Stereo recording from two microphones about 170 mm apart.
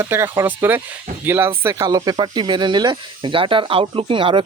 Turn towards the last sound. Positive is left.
turn(degrees=-30)  # may be behind; listen again after turning